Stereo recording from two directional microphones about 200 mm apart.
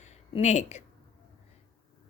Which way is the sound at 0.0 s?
35° left (ahead or behind).